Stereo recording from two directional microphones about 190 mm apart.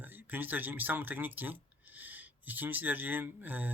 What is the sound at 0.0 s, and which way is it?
Speech, 10° right (ahead or behind).